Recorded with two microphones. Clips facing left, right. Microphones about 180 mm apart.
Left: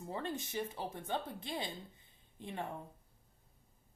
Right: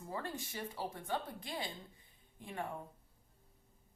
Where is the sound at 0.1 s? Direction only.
20° left (ahead or behind).